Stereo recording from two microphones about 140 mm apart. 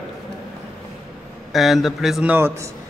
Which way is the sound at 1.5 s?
Centre (ahead or behind).